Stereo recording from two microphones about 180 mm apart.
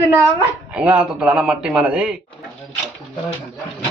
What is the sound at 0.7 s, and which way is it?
A man's voice, 5° right (ahead or behind).